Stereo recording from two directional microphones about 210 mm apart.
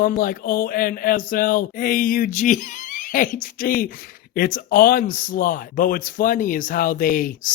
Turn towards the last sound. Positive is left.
turn(degrees=40)  # may be behind; listen again after turning